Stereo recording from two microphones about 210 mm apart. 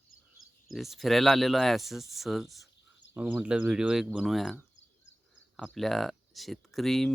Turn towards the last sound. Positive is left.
turn(degrees=0)  # may be behind; listen again after turning